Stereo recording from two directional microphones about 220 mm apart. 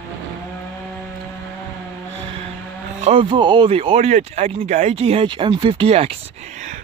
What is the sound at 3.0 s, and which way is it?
Speech, 25° right (ahead or behind).